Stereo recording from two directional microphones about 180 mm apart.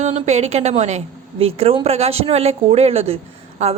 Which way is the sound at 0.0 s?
40° right (ahead or behind).